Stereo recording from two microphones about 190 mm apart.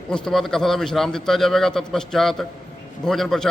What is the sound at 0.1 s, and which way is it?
A man's voice, centre (ahead or behind).